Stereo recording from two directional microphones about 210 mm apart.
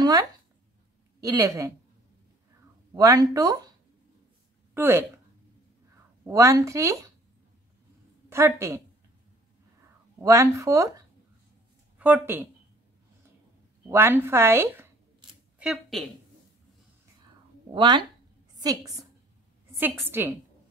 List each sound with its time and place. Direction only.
0.0 s a woman's voice: 20° right (ahead or behind)
2.9 s a woman's voice: 15° right (ahead or behind)
4.7 s a woman's voice: 10° right (ahead or behind)
6.2 s a woman's voice: 15° right (ahead or behind)
8.3 s a woman's voice: 15° right (ahead or behind)
10.2 s a woman's voice: 15° right (ahead or behind)
13.8 s a woman's voice: 10° right (ahead or behind)
15.6 s a woman's voice: centre (ahead or behind)
17.7 s speech: 20° right (ahead or behind)
19.8 s a woman's voice: 10° right (ahead or behind)